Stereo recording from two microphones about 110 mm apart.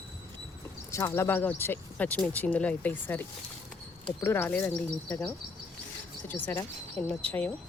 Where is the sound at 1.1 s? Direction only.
20° left (ahead or behind).